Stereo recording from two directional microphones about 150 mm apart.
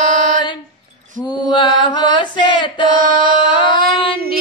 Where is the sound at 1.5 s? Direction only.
30° left (ahead or behind).